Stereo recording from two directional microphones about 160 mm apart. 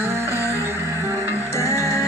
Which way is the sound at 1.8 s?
15° right (ahead or behind).